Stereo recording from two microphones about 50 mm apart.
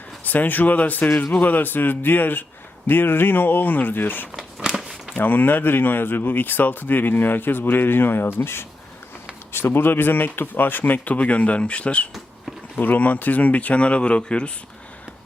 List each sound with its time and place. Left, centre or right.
0.3 s speech: left
4.8 s a sound: centre
5.1 s speech: left; by 14.5 s centre